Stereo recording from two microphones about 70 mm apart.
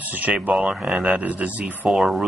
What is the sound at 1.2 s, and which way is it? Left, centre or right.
Speech, right.